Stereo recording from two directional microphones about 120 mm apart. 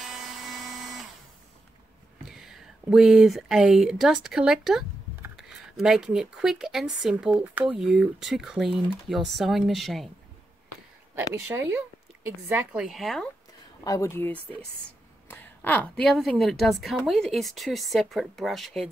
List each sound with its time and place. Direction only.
0.0 s tools: centre (ahead or behind)
2.4 s speech: 5° right (ahead or behind)
11.1 s speech: 20° right (ahead or behind)
12.8 s speech: centre (ahead or behind)
13.8 s speech: 25° left (ahead or behind); by 18.9 s centre (ahead or behind)